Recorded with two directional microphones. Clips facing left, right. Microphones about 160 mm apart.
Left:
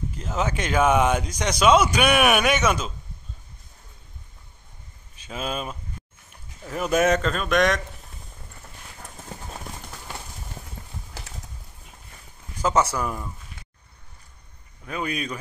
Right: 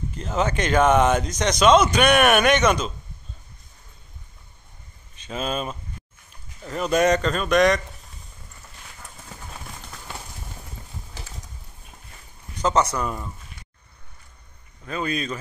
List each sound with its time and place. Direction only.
0.1 s speech: 5° left (ahead or behind)
5.1 s speech: 10° left (ahead or behind)
9.1 s clip-clop: 25° left (ahead or behind)
9.8 s clip-clop: 5° left (ahead or behind)
12.5 s speech: 5° left (ahead or behind)
14.9 s speech: 10° left (ahead or behind)